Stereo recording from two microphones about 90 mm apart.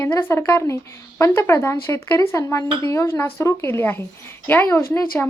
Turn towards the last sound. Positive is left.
turn(degrees=30)  # may be behind; listen again after turning